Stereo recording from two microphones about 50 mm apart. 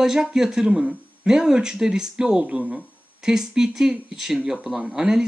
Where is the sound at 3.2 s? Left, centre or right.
Centre.